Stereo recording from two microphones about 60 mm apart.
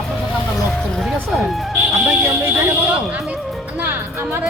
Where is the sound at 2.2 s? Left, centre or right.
Right.